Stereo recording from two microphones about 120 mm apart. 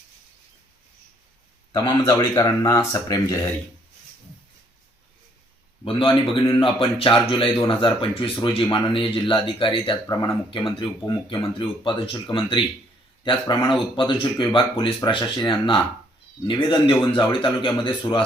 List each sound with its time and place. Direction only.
1.7 s speech: 35° left (ahead or behind)
5.8 s speech: 45° left (ahead or behind)
13.9 s speech: 40° left (ahead or behind)